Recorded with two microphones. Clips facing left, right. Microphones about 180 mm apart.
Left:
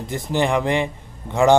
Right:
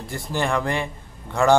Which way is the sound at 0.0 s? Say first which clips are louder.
Left 4 dB; 20° left (ahead or behind).